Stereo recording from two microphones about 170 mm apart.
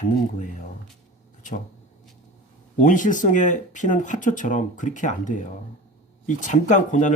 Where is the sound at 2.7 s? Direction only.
50° left (ahead or behind).